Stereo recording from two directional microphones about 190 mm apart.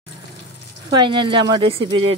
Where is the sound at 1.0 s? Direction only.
25° right (ahead or behind).